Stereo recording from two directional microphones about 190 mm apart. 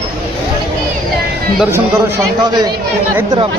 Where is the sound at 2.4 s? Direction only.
20° right (ahead or behind).